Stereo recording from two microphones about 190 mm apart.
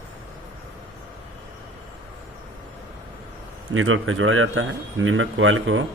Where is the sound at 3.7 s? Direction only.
90° right.